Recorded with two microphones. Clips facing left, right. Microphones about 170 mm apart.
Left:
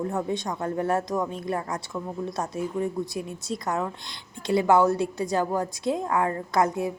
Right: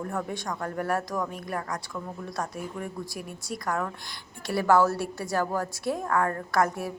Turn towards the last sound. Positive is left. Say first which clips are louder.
# left 2 dB
turn(degrees=20)  # may be behind; listen again after turning